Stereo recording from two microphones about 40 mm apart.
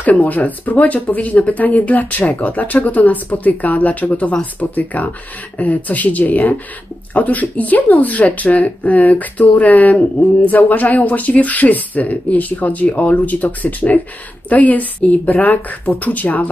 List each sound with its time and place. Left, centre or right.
0.0 s speech: left
4.7 s speech: left